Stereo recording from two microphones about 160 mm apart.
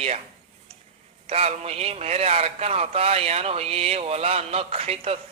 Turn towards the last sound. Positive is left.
turn(degrees=-40)  # may be behind; listen again after turning